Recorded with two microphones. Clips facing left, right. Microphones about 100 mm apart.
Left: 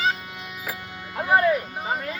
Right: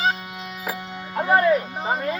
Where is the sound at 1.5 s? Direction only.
25° right (ahead or behind).